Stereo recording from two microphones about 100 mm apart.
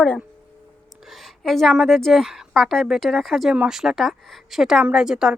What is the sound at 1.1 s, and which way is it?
A woman's voice, centre (ahead or behind).